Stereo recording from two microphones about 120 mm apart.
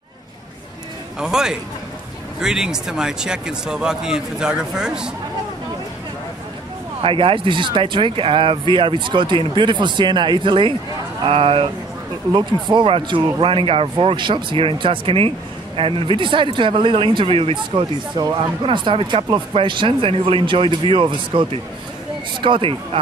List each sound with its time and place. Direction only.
1.2 s speech: 5° right (ahead or behind)
7.0 s speech: 50° right (ahead or behind)